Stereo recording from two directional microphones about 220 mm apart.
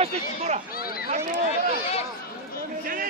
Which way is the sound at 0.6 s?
45° left (ahead or behind).